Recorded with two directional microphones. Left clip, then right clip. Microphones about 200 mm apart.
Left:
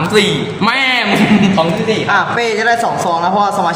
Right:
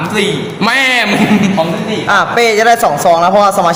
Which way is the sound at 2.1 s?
55° right (ahead or behind).